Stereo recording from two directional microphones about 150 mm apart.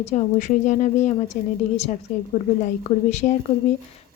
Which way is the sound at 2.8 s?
50° left (ahead or behind).